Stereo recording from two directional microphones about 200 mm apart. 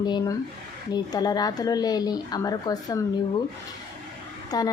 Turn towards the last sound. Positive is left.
turn(degrees=20)  # may be behind; listen again after turning